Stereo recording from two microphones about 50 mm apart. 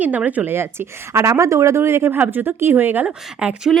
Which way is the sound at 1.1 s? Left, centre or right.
Right.